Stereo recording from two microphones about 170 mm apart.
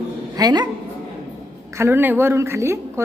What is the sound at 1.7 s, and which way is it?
A woman's voice, 15° right (ahead or behind).